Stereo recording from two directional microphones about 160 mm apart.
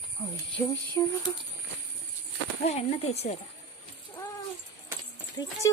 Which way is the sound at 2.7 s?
40° left (ahead or behind).